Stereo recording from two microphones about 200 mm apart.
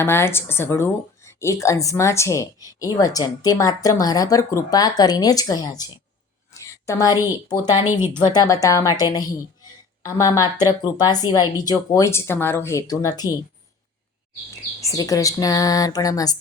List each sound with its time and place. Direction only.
0.0 s a woman's voice: 10° left (ahead or behind)
7.9 s speech: 10° right (ahead or behind)
8.3 s speech: 20° left (ahead or behind)
14.8 s speech: 15° left (ahead or behind)